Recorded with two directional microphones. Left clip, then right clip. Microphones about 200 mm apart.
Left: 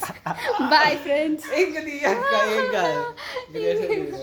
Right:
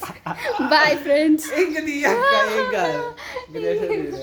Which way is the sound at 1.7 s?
35° right (ahead or behind).